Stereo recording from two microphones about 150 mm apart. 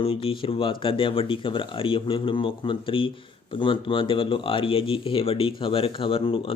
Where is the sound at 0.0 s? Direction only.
40° left (ahead or behind).